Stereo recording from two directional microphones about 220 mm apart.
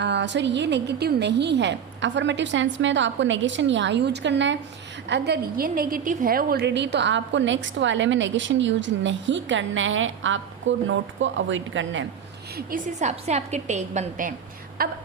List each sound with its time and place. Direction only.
0.0 s a woman's voice: 55° right (ahead or behind)
12.5 s a woman's voice: 40° right (ahead or behind)